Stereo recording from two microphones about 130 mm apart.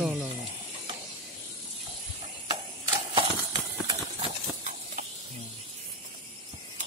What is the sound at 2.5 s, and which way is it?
Mechanisms, 40° right (ahead or behind).